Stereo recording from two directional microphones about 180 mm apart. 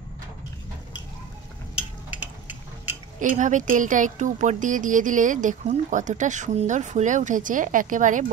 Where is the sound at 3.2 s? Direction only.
45° right (ahead or behind).